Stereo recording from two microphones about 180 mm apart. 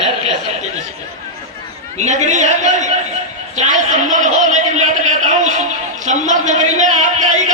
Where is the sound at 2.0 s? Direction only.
40° right (ahead or behind).